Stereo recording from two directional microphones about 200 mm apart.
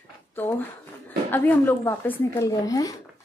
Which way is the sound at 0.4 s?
10° left (ahead or behind).